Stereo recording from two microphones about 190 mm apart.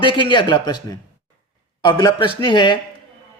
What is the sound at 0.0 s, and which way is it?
Speech, 25° left (ahead or behind).